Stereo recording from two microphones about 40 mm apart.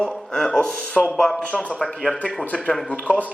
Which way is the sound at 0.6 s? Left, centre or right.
Left.